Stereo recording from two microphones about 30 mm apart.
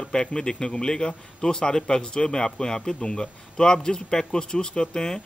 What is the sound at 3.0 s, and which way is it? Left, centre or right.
Speech, left.